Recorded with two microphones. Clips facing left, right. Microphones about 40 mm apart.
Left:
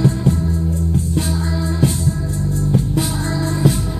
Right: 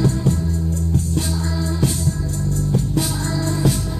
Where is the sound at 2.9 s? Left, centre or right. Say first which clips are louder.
Left 2 dB; centre.